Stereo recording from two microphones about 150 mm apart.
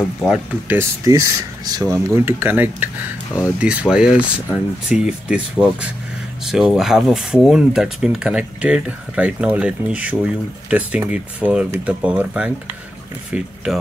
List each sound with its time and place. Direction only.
0.2 s speech: 5° right (ahead or behind)
0.7 s speech: 20° right (ahead or behind)